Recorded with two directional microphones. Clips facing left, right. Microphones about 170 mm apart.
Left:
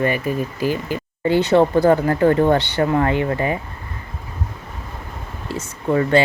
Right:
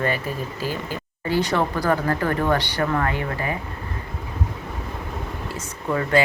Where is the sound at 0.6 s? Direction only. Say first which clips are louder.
Left 7 dB; 15° left (ahead or behind).